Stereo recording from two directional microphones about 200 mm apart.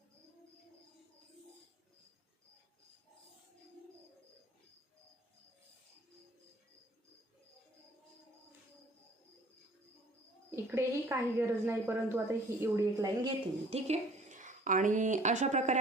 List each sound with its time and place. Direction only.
10.5 s a woman's voice: 10° right (ahead or behind)
13.7 s a woman's voice: 30° right (ahead or behind)